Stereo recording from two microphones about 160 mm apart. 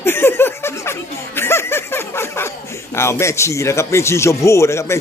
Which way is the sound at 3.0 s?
15° left (ahead or behind).